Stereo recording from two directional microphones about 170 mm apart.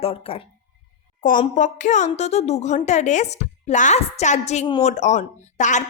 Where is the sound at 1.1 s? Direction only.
50° left (ahead or behind).